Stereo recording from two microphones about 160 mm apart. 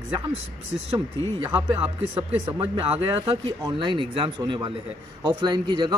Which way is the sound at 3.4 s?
30° right (ahead or behind).